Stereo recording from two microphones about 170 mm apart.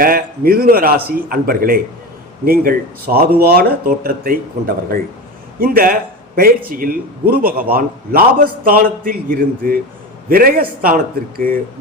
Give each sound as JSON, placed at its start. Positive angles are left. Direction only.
{"t": 0.0, "sound": "a man's voice", "side_deg": -60}